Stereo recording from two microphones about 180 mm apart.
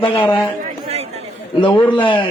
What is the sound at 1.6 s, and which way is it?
Speech, 25° left (ahead or behind).